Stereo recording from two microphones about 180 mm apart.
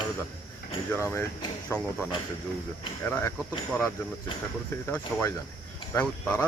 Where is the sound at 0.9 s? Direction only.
15° left (ahead or behind).